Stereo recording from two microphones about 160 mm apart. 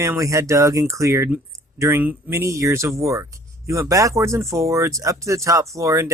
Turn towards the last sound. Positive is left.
turn(degrees=-20)  # may be behind; listen again after turning